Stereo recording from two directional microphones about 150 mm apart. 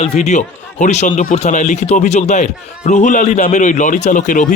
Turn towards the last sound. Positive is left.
turn(degrees=60)  # may be behind; listen again after turning